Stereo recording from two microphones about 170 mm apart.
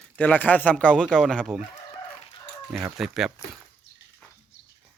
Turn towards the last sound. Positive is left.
turn(degrees=0)  # may be behind; listen again after turning